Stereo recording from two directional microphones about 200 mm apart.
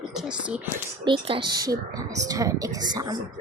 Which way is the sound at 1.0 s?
25° right (ahead or behind).